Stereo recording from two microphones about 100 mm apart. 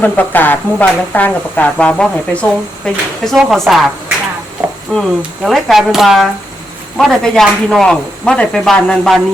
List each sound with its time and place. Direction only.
0.0 s speech: 20° left (ahead or behind); by 3.6 s centre (ahead or behind)
4.9 s speech: centre (ahead or behind)